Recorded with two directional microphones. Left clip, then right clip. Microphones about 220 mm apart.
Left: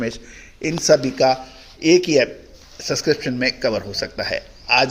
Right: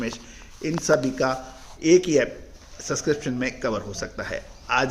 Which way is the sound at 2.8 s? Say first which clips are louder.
Left 5 dB; 30° right (ahead or behind).